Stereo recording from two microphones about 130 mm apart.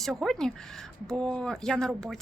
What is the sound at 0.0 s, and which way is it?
Speech, centre (ahead or behind).